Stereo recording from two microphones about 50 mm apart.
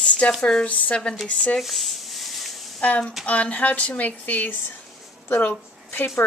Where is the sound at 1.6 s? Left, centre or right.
Centre.